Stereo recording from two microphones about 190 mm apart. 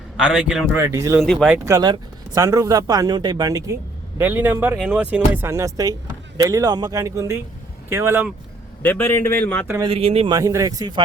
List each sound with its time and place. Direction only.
0.2 s a man's voice: 5° right (ahead or behind)
0.8 s speech: 15° right (ahead or behind)
1.2 s a man's voice: centre (ahead or behind)
1.5 s speech: 15° right (ahead or behind)
4.2 s speech: 10° right (ahead or behind)
8.8 s a man's voice: 10° left (ahead or behind)
9.8 s speech: 30° right (ahead or behind)
10.3 s speech: 15° right (ahead or behind)